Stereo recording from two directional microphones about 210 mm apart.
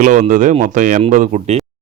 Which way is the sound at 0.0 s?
35° right (ahead or behind).